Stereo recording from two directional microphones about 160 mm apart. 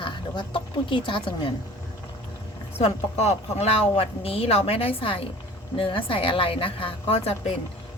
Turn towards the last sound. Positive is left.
turn(degrees=35)  # may be behind; listen again after turning